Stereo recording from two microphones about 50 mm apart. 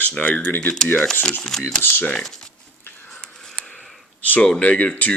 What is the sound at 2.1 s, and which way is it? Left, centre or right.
Speech, centre.